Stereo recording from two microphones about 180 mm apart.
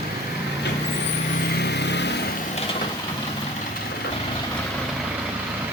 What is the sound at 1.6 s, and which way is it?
Vehicle, 70° left (ahead or behind).